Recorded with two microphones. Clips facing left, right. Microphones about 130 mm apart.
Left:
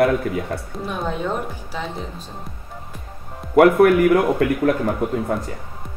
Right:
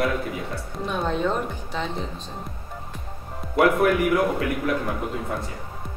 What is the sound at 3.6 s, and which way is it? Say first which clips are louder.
Speech: left 7 dB; 55° left (ahead or behind).